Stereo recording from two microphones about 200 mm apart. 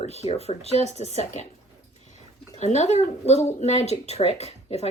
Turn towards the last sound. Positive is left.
turn(degrees=30)  # may be behind; listen again after turning